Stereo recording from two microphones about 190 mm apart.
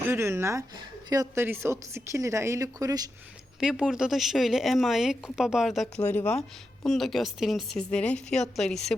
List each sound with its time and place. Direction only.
0.1 s a woman's voice: 15° right (ahead or behind)
3.6 s a woman's voice: 5° right (ahead or behind)